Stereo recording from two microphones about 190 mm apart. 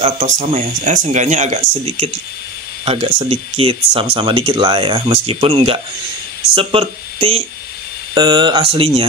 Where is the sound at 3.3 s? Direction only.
30° right (ahead or behind).